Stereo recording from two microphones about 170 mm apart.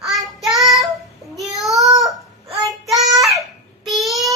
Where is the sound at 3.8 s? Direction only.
Centre (ahead or behind).